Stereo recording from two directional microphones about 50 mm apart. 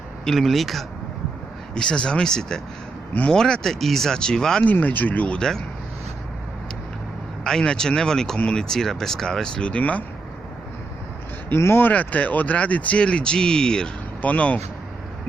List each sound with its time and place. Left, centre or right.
0.3 s speech: centre
1.7 s speech: centre
4.6 s speech: left
5.4 s speech: centre
7.4 s speech: centre
9.6 s speech: left
11.4 s speech: left
11.9 s speech: left; by 13.9 s centre
14.2 s speech: left